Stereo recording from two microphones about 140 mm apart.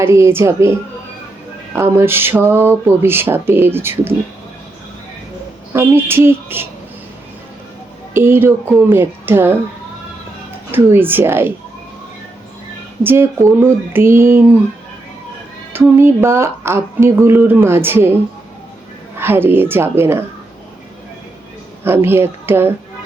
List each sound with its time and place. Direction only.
0.0 s a woman's voice: 20° right (ahead or behind)
5.7 s speech: 15° right (ahead or behind)
8.1 s speech: 15° right (ahead or behind)
10.7 s speech: 15° right (ahead or behind)
13.0 s speech: 15° right (ahead or behind)
15.7 s speech: 15° right (ahead or behind)
19.2 s speech: 15° right (ahead or behind)
21.8 s speech: 15° right (ahead or behind)